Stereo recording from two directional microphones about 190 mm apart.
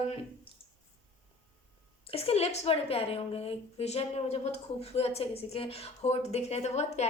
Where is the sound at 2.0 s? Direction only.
30° left (ahead or behind).